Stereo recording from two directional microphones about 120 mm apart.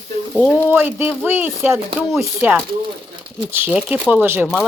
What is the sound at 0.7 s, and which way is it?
Speech, 15° right (ahead or behind).